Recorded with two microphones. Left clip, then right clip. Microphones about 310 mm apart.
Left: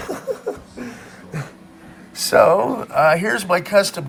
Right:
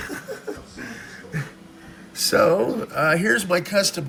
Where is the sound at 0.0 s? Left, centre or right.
Centre.